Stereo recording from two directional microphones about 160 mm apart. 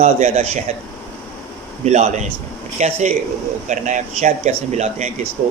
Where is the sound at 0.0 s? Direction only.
45° right (ahead or behind).